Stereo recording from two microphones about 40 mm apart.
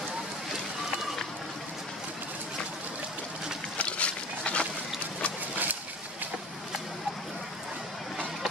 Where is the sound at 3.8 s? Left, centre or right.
Left.